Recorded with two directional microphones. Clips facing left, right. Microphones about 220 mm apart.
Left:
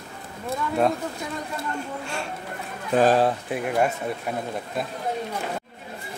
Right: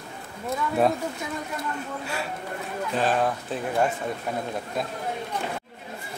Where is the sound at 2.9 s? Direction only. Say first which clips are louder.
Left 6 dB; 40° left (ahead or behind).